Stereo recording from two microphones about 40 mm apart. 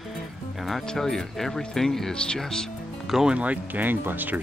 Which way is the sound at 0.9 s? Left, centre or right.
Centre.